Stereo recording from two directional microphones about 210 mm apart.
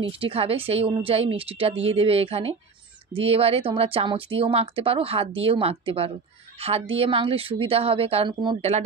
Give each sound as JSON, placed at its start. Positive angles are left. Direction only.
{"t": 0.1, "sound": "speech", "side_deg": -25}